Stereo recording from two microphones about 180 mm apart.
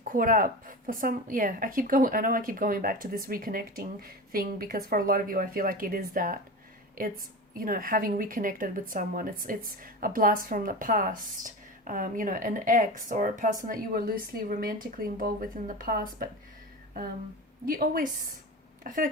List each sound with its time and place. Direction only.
0.0 s speech: 50° right (ahead or behind)
17.7 s speech: 50° right (ahead or behind)